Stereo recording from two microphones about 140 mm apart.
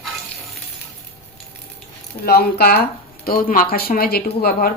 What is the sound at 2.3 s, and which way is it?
Speech, 90° left.